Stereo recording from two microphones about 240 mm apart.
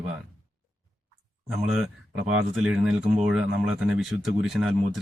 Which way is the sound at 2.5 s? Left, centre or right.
Centre.